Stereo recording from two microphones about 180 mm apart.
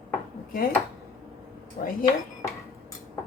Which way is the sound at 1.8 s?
50° left (ahead or behind).